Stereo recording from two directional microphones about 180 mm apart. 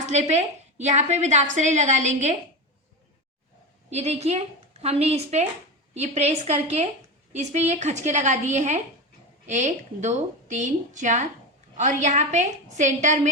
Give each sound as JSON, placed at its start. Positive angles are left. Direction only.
{"t": 0.0, "sound": "a woman's voice", "side_deg": -40}
{"t": 3.8, "sound": "a woman's voice", "side_deg": -35}